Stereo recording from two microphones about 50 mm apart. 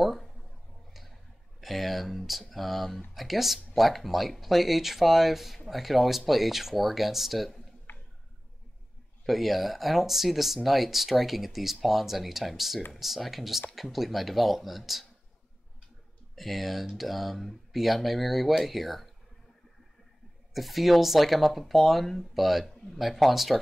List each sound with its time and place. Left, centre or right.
0.0 s a sound: centre
1.6 s a sound: centre
2.5 s speech: centre
7.9 s tick-tock: left
9.2 s speech: centre
16.3 s speech: centre
20.5 s speech: centre